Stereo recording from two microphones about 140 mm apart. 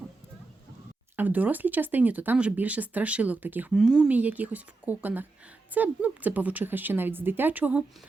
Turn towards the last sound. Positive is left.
turn(degrees=-10)  # may be behind; listen again after turning